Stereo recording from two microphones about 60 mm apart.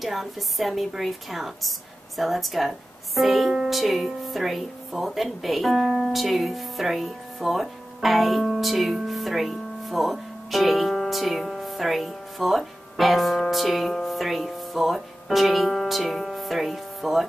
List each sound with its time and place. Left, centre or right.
0.0 s music: centre
8.5 s speech: centre